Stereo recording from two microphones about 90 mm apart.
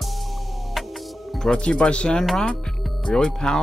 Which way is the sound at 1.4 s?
10° left (ahead or behind).